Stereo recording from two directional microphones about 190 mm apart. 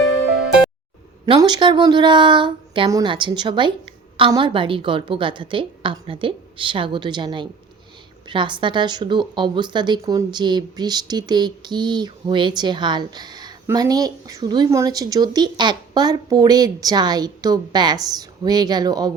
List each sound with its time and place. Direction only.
1.2 s speech: 25° right (ahead or behind)